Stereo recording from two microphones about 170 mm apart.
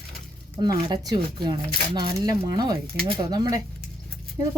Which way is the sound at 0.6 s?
25° right (ahead or behind).